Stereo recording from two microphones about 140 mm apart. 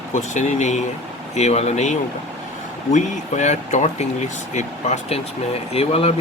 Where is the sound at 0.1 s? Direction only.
60° left (ahead or behind).